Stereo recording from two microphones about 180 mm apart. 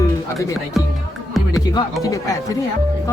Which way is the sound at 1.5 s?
20° left (ahead or behind).